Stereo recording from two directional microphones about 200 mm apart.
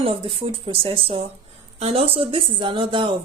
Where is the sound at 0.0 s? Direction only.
25° right (ahead or behind).